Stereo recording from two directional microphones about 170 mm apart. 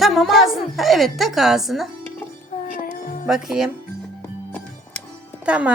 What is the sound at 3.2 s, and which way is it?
Speech, centre (ahead or behind).